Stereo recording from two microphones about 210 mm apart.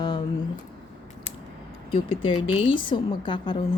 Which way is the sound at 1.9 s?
25° left (ahead or behind).